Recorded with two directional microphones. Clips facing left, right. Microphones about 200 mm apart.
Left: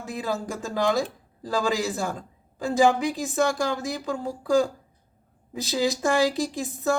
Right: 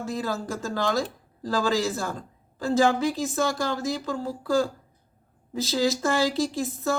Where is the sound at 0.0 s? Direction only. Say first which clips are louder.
Even; 15° left (ahead or behind).